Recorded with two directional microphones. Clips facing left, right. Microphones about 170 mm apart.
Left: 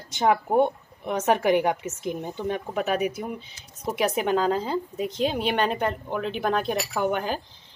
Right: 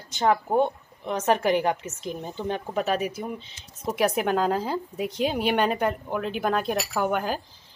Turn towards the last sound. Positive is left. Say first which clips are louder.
# even
turn(degrees=-5)  # may be behind; listen again after turning